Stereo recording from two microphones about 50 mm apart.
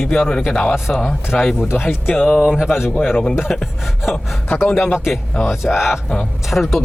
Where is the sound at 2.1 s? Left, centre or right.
Left.